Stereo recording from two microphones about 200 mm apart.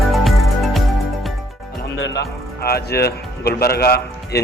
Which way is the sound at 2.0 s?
60° left (ahead or behind).